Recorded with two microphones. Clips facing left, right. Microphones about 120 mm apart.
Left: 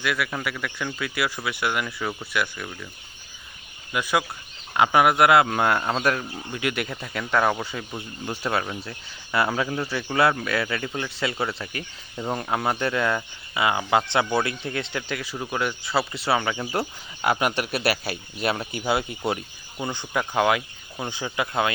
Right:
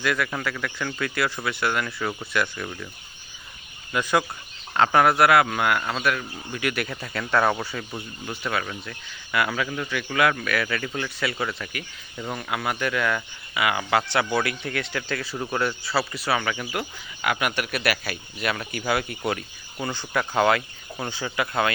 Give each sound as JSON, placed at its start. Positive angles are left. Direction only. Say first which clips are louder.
{"t": 0.0, "sound": "speech", "louder": "right 1 dB", "side_deg": 5}
{"t": 3.9, "sound": "a man's voice", "louder": "right 1 dB", "side_deg": 10}
{"t": 6.5, "sound": "a man's voice", "louder": "even", "side_deg": 20}
{"t": 6.9, "sound": "speech", "louder": "even", "side_deg": 10}
{"t": 7.6, "sound": "speech", "louder": "even", "side_deg": 15}
{"t": 9.3, "sound": "a man's voice", "louder": "left 2 dB", "side_deg": 30}
{"t": 17.2, "sound": "speech", "louder": "left 2 dB", "side_deg": 35}